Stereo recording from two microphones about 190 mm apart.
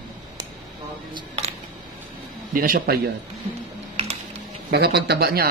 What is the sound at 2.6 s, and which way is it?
Speech, 50° right (ahead or behind).